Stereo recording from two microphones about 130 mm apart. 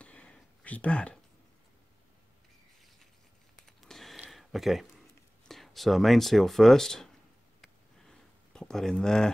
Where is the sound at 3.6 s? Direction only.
5° left (ahead or behind).